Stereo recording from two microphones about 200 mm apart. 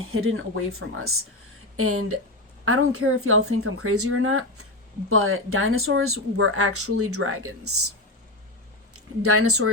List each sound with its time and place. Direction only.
0.0 s speech: 90° right